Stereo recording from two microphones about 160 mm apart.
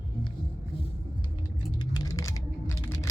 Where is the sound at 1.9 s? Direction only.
20° left (ahead or behind).